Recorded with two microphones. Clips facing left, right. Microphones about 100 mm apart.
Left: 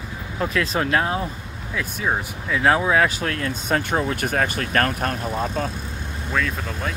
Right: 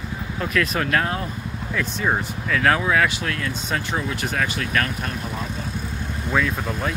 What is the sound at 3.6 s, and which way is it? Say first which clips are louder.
Speech: left 7 dB; 50° left (ahead or behind).